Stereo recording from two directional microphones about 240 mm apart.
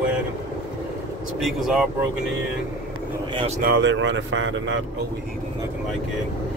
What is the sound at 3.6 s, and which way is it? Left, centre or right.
Speech, right.